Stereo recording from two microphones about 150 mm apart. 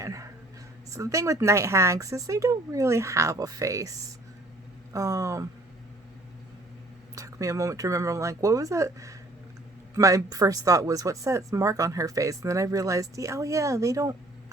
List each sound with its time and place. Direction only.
0.0 s a sound: 20° right (ahead or behind)
0.9 s speech: 20° right (ahead or behind)
4.9 s speech: 20° right (ahead or behind)
7.2 s speech: 20° right (ahead or behind)